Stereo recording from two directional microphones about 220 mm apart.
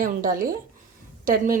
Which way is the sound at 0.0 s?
40° right (ahead or behind).